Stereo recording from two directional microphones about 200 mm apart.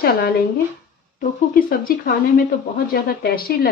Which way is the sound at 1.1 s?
45° left (ahead or behind).